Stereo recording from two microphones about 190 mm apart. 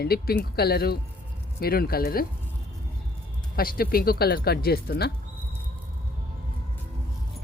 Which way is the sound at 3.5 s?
50° left (ahead or behind).